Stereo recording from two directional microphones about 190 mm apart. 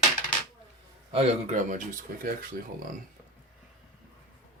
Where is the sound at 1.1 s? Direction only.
35° right (ahead or behind).